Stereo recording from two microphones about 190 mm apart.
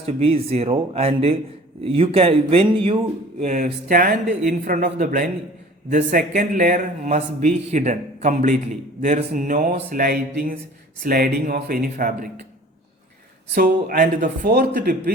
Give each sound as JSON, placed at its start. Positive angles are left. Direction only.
{"t": 0.0, "sound": "speech", "side_deg": -30}
{"t": 3.4, "sound": "a man's voice", "side_deg": -40}
{"t": 13.5, "sound": "a man's voice", "side_deg": -55}